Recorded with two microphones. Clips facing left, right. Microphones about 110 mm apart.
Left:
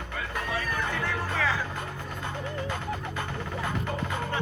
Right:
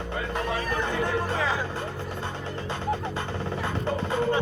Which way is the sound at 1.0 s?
20° right (ahead or behind).